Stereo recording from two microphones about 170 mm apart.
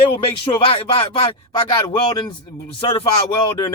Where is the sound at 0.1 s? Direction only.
30° left (ahead or behind).